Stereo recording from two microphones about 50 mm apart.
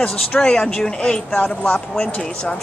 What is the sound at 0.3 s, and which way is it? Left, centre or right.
Speech, centre.